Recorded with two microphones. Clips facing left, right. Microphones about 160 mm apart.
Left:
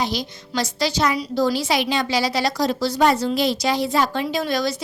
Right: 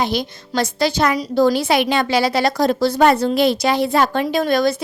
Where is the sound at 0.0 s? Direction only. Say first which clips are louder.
Right 4 dB; 55° right (ahead or behind).